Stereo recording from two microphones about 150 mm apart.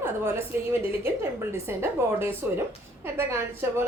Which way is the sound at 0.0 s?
15° right (ahead or behind).